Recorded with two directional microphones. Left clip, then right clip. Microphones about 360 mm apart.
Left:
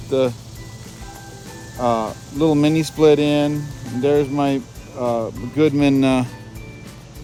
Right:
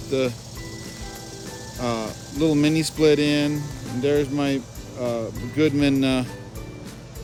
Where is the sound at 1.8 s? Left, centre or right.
Centre.